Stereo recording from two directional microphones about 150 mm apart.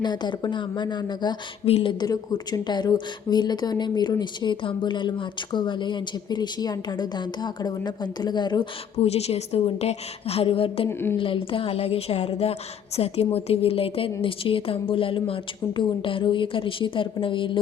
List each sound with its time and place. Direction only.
0.0 s speech: 30° left (ahead or behind)
9.0 s a woman's voice: 45° left (ahead or behind)
10.8 s speech: 15° left (ahead or behind)
11.2 s a woman's voice: 35° left (ahead or behind)